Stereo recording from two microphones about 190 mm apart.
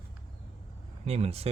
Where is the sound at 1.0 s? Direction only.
35° right (ahead or behind).